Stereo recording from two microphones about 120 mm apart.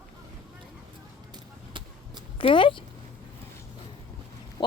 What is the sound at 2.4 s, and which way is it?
Speech, 45° left (ahead or behind).